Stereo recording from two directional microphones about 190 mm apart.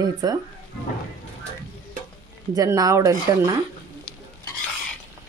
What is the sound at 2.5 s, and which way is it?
Speech, 20° right (ahead or behind).